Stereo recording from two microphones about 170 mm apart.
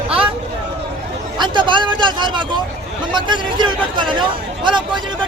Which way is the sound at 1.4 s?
25° right (ahead or behind).